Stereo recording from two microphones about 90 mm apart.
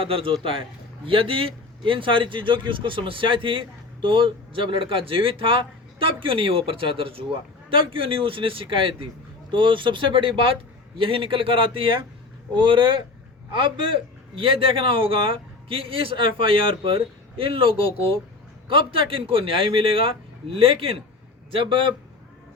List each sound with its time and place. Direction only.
0.0 s a man's voice: 85° right
7.7 s speech: 80° right
12.5 s a man's voice: 65° right (ahead or behind); by 18.2 s 85° right
18.7 s a man's voice: 75° right (ahead or behind)
21.5 s speech: 70° right (ahead or behind)